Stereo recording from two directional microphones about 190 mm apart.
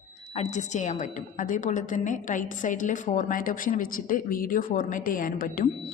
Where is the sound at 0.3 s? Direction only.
40° left (ahead or behind).